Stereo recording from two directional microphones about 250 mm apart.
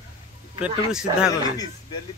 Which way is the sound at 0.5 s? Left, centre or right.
Centre.